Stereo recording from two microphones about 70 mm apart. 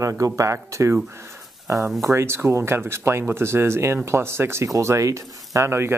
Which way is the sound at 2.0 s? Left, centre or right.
Right.